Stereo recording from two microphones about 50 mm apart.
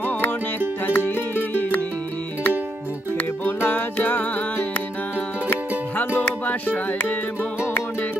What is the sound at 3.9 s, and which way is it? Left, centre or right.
Music, left.